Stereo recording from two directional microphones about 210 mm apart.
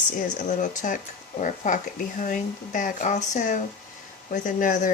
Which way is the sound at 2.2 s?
40° left (ahead or behind).